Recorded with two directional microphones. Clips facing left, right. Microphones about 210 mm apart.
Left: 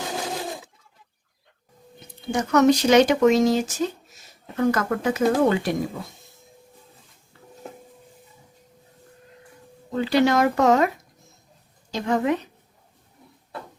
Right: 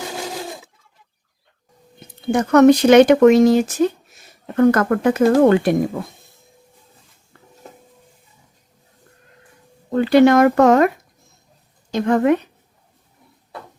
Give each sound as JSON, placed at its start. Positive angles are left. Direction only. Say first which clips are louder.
{"t": 2.3, "sound": "speech", "louder": "right 7 dB", "side_deg": -55}
{"t": 9.9, "sound": "speech", "louder": "right 8 dB", "side_deg": -55}